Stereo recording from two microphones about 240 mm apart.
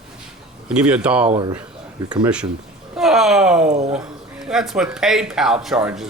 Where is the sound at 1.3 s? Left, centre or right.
Right.